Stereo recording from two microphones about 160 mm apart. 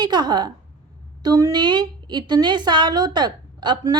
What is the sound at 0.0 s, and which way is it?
A woman's voice, 25° right (ahead or behind).